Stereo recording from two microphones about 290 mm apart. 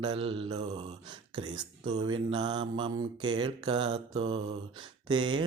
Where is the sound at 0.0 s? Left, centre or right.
Centre.